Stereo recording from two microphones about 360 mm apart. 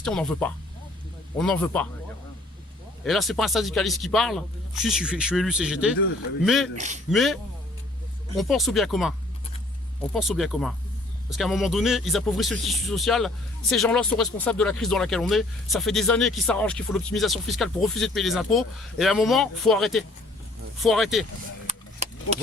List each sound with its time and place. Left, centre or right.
0.0 s speech: centre
3.0 s speech: centre
6.7 s speech: centre
7.1 s speech: centre
8.4 s speech: centre
10.2 s speech: centre
21.7 s a sound: centre